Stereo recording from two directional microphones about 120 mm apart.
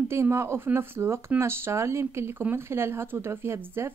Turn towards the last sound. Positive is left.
turn(degrees=-20)  # may be behind; listen again after turning